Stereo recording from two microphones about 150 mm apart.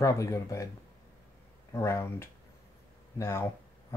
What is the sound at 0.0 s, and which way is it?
Speech, 20° left (ahead or behind).